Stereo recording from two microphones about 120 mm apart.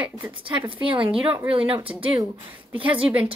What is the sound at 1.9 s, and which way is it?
A woman's voice, 10° right (ahead or behind).